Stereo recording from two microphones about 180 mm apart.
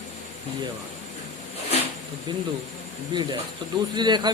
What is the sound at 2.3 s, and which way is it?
Speech, 25° right (ahead or behind).